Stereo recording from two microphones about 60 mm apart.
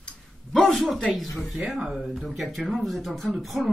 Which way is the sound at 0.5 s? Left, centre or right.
Centre.